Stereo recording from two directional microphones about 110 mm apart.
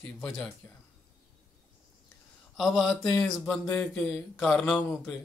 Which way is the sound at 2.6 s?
Centre (ahead or behind).